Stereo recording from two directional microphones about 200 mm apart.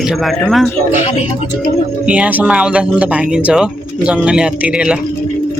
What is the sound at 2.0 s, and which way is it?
Speech, 5° right (ahead or behind).